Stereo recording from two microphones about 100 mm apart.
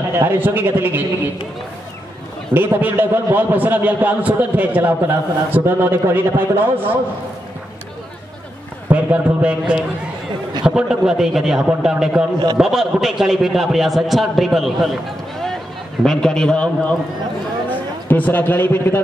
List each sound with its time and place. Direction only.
0.1 s a man's voice: 25° right (ahead or behind)
2.5 s a man's voice: 20° right (ahead or behind)
8.8 s a man's voice: 15° right (ahead or behind)
16.0 s a man's voice: 5° left (ahead or behind); by 18.9 s 20° left (ahead or behind)